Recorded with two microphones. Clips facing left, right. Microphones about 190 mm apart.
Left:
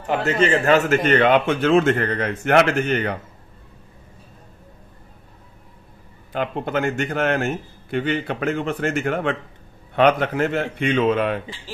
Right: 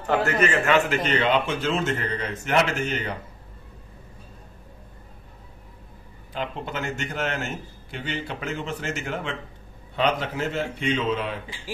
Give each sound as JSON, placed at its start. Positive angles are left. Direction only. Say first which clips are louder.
{"t": 0.0, "sound": "a man's voice", "louder": "left 2 dB", "side_deg": 20}
{"t": 0.7, "sound": "a man's voice", "louder": "left 5 dB", "side_deg": 45}
{"t": 6.3, "sound": "a man's voice", "louder": "left 7 dB", "side_deg": 55}